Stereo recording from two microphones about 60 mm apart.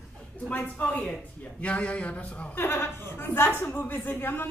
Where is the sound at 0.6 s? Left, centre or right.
Left.